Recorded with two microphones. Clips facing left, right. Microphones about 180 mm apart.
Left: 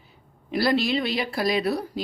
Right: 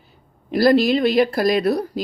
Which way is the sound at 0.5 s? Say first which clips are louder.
Right 7 dB; 40° right (ahead or behind).